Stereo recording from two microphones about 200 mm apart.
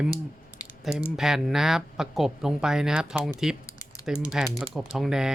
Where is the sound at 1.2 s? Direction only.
Centre (ahead or behind).